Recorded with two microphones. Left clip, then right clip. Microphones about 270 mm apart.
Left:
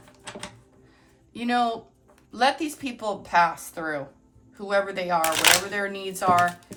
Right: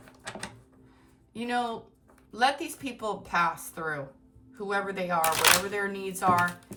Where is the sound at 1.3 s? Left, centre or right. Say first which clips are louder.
Left 6 dB; left.